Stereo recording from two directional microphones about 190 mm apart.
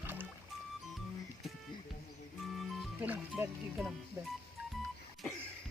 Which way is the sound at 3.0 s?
10° right (ahead or behind).